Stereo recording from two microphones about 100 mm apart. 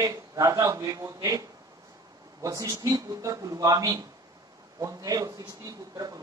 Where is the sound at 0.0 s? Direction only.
35° right (ahead or behind).